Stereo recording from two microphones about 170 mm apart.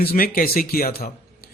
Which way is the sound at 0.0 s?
60° left (ahead or behind).